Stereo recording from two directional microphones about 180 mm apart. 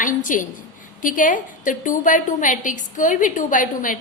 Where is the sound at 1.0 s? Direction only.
50° left (ahead or behind).